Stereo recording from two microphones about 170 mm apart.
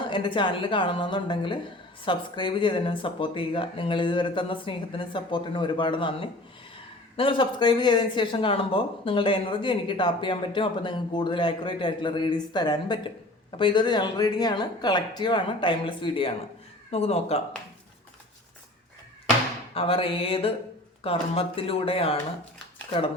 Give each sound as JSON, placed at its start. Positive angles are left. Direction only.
{"t": 0.1, "sound": "a woman's voice", "side_deg": 30}
{"t": 19.7, "sound": "speech", "side_deg": 35}